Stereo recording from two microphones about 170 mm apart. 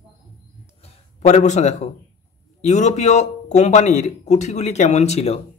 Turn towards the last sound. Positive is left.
turn(degrees=40)  # may be behind; listen again after turning